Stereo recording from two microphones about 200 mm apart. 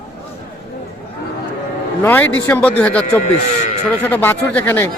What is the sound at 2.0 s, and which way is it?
Speech, 10° left (ahead or behind).